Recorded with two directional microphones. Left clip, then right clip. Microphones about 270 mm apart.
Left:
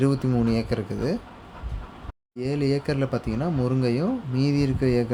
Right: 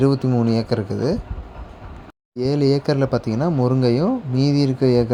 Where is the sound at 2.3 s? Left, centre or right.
Centre.